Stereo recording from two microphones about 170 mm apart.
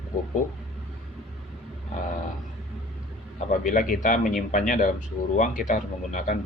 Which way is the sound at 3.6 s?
50° left (ahead or behind).